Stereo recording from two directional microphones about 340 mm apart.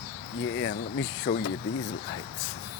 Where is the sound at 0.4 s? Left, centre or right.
Left.